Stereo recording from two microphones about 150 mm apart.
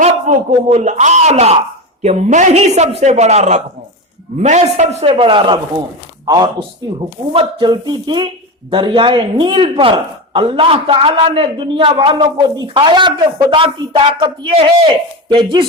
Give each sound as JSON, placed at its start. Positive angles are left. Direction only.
{"t": 0.0, "sound": "a man's voice", "side_deg": -50}